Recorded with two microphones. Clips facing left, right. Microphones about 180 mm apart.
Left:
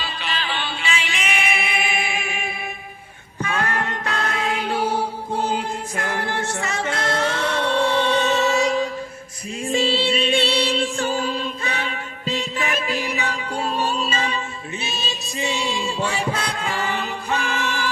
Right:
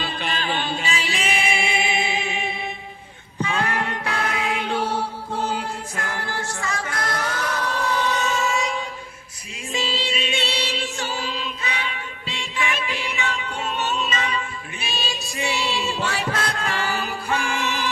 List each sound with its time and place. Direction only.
0.0 s chant: 50° right (ahead or behind); by 2.5 s 25° right (ahead or behind)
3.4 s music: 15° right (ahead or behind); by 10.3 s 35° left (ahead or behind)
10.9 s music: 50° left (ahead or behind); by 16.8 s 10° left (ahead or behind)
16.9 s music: 10° right (ahead or behind)